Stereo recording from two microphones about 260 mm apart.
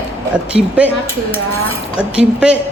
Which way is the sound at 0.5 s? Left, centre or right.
Centre.